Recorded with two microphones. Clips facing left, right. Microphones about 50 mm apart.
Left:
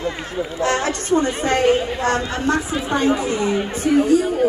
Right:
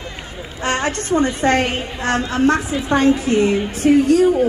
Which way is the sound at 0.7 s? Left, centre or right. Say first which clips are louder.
Right 2 dB; right.